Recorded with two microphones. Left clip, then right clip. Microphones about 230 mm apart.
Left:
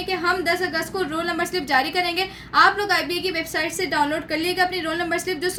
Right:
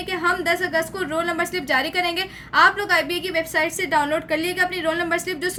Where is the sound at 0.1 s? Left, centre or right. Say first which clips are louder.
Right 1 dB; right.